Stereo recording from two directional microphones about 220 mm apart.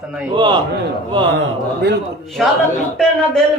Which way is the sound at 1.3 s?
50° right (ahead or behind).